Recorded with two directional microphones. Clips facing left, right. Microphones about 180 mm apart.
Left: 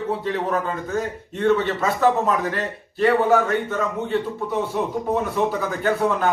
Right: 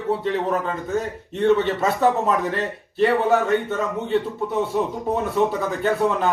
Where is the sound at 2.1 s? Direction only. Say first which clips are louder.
Left 2 dB; centre (ahead or behind).